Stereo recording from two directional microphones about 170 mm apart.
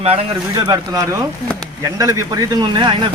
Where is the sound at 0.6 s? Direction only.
20° right (ahead or behind).